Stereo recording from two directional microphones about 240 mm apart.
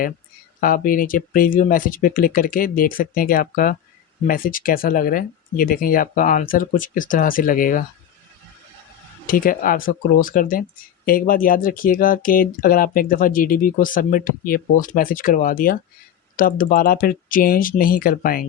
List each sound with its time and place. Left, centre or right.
0.6 s speech: left
9.2 s speech: left